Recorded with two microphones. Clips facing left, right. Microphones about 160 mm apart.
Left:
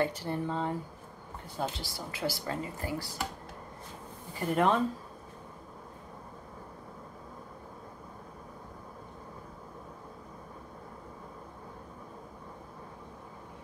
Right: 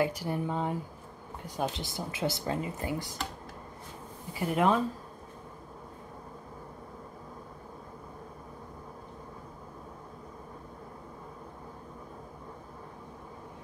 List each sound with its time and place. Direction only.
0.0 s speech: 10° right (ahead or behind)
4.3 s speech: 5° right (ahead or behind)